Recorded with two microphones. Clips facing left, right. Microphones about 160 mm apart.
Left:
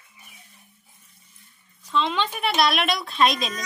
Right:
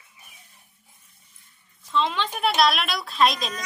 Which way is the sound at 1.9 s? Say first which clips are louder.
Left 1 dB; centre (ahead or behind).